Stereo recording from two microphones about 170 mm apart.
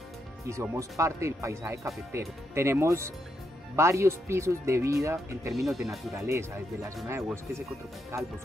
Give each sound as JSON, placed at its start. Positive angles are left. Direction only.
{"t": 0.5, "sound": "speech", "side_deg": -20}
{"t": 5.7, "sound": "speech", "side_deg": 0}
{"t": 6.1, "sound": "speech", "side_deg": -15}
{"t": 8.1, "sound": "speech", "side_deg": -15}